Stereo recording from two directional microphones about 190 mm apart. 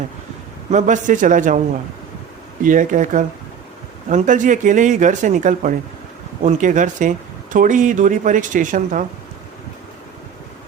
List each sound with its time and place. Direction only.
0.7 s speech: 40° right (ahead or behind)
2.6 s speech: 45° right (ahead or behind)